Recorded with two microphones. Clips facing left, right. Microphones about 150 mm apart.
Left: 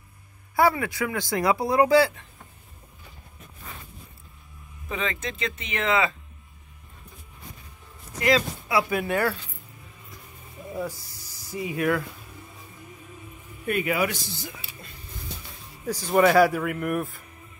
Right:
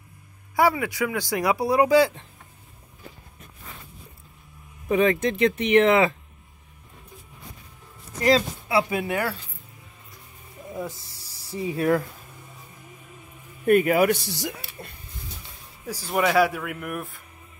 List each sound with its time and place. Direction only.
0.6 s speech: 15° right (ahead or behind)
4.9 s speech: 55° right (ahead or behind)
8.2 s speech: 30° right (ahead or behind)
9.0 s speech: 15° right (ahead or behind)
10.8 s speech: 25° right (ahead or behind)
13.7 s speech: 45° right (ahead or behind); by 14.5 s 75° right (ahead or behind)
15.9 s speech: 5° right (ahead or behind)